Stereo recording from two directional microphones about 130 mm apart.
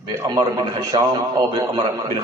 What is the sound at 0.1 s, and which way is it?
A man's voice, 30° right (ahead or behind).